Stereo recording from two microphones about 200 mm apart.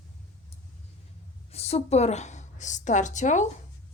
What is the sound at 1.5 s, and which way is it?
A woman's voice, 30° left (ahead or behind).